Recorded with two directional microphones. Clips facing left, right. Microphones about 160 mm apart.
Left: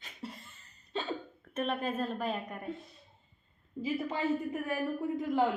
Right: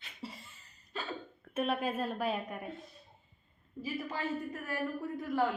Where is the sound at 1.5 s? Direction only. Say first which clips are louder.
Even; 5° right (ahead or behind).